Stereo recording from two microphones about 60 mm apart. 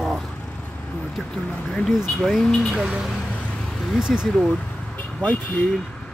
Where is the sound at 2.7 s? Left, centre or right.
Centre.